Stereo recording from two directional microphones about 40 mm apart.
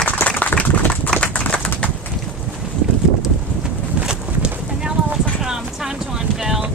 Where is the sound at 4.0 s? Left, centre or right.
Right.